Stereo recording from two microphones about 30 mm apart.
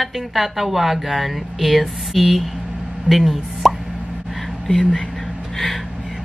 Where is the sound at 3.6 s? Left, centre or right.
Centre.